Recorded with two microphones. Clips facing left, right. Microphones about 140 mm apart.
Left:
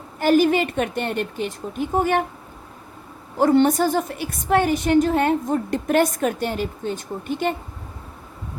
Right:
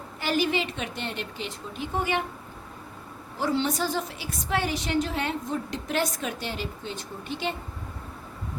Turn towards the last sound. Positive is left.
turn(degrees=50)  # may be behind; listen again after turning